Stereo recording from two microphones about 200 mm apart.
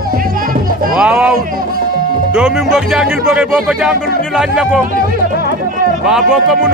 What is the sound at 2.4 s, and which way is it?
Speech, 5° right (ahead or behind).